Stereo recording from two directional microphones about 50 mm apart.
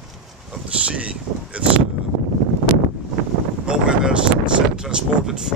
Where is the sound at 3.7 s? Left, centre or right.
Centre.